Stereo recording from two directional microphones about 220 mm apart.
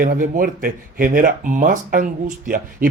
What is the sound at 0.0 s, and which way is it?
Speech, 40° right (ahead or behind).